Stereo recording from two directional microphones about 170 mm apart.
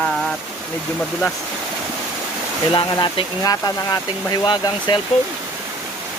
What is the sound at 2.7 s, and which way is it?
Speech, 25° left (ahead or behind).